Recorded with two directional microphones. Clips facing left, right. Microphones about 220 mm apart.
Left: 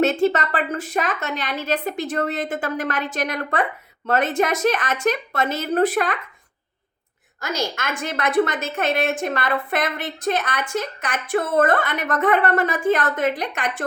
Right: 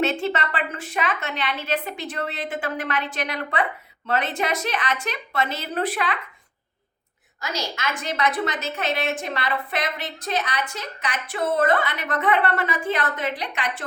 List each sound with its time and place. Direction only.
0.0 s a woman's voice: 45° left (ahead or behind)
7.4 s a woman's voice: 50° left (ahead or behind)